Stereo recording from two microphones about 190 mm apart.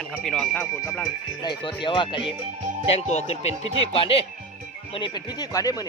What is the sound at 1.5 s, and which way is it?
Speech, 25° left (ahead or behind).